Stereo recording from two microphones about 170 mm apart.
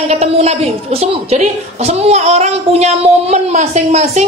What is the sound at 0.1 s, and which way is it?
A woman's voice, 40° right (ahead or behind).